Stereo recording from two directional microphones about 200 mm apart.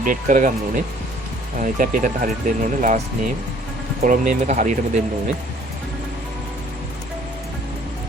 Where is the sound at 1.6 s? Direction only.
45° right (ahead or behind).